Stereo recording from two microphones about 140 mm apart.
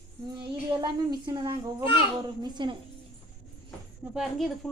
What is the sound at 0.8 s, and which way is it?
A woman's voice, 35° right (ahead or behind).